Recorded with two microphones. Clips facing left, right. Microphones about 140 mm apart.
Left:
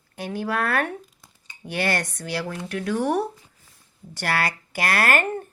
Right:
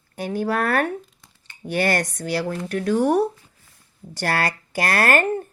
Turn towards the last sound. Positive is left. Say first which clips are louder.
# right 3 dB
turn(degrees=-40)  # may be behind; listen again after turning